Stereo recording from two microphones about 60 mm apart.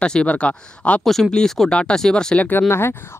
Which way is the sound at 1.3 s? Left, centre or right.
Centre.